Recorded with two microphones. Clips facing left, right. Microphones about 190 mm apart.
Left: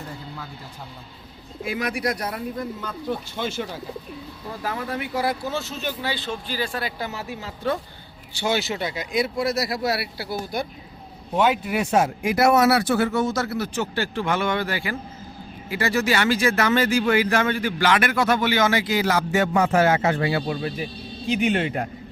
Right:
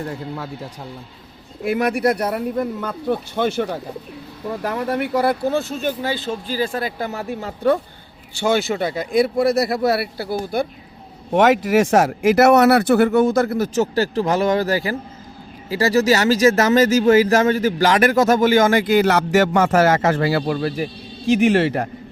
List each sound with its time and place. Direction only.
0.0 s speech: 70° right (ahead or behind)
1.6 s speech: 60° right (ahead or behind)
11.3 s speech: 90° right